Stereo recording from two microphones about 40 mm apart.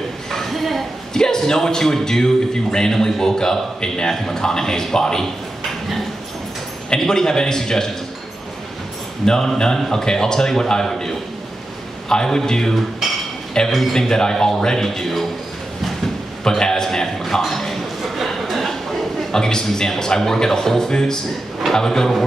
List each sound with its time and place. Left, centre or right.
0.3 s a sound: centre
1.1 s a man's voice: centre
6.9 s a man's voice: centre
9.2 s a man's voice: centre
13.7 s a man's voice: centre
13.9 s a man's voice: centre
16.4 s a man's voice: centre
17.4 s a sound: centre
19.3 s a man's voice: centre